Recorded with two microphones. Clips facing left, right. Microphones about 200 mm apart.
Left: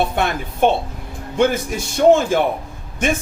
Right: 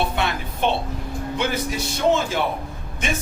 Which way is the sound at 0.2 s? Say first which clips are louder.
Left 6 dB; 50° left (ahead or behind).